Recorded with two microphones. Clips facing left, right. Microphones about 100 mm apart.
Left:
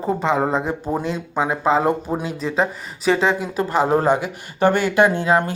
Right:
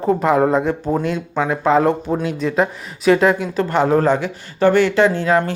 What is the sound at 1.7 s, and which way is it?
Speech, 5° left (ahead or behind).